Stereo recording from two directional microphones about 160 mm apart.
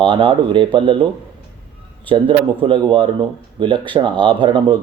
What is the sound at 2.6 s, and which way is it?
Speech, 30° right (ahead or behind).